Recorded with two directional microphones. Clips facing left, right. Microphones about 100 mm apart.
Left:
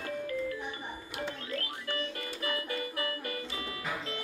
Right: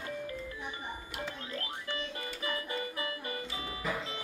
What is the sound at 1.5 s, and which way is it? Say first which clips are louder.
Music: left 2 dB; 25° right (ahead or behind).